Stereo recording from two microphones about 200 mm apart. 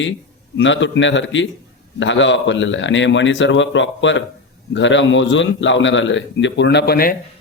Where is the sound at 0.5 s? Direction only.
65° left (ahead or behind); by 7.2 s 50° left (ahead or behind).